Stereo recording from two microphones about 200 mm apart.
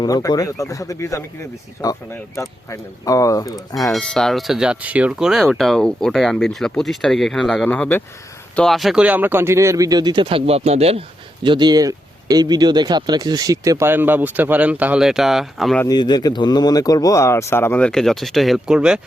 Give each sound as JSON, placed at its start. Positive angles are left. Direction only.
{"t": 0.0, "sound": "speech", "side_deg": 20}
{"t": 3.9, "sound": "speech", "side_deg": 5}
{"t": 15.8, "sound": "speech", "side_deg": 20}